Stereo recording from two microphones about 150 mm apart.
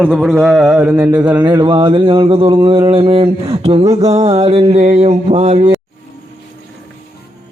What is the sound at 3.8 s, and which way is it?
Speech, 20° right (ahead or behind).